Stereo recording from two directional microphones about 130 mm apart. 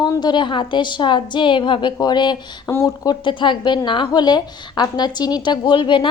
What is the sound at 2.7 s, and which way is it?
A woman's voice, 20° left (ahead or behind).